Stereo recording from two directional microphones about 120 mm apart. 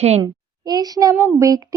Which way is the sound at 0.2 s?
35° right (ahead or behind).